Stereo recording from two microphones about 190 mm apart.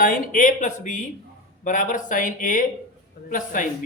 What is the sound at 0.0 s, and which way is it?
Speech, 45° left (ahead or behind).